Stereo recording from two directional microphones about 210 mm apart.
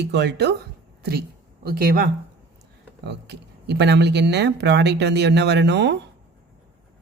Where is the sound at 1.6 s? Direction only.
45° right (ahead or behind).